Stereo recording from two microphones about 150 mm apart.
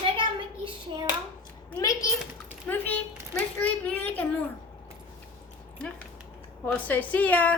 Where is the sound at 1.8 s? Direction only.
25° left (ahead or behind).